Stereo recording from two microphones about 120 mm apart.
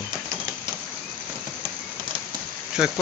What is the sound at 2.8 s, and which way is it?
Speech, 5° right (ahead or behind).